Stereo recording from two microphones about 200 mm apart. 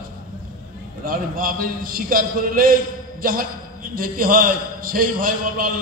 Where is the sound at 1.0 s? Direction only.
45° right (ahead or behind).